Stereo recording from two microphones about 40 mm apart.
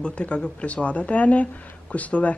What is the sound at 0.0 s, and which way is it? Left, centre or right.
A woman's voice, left.